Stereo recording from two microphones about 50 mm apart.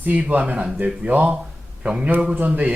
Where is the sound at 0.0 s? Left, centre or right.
Right.